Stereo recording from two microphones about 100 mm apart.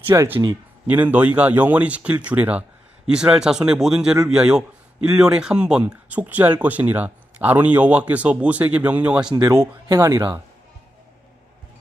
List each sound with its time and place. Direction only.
0.1 s speech: 20° right (ahead or behind)
9.3 s speech: 35° right (ahead or behind)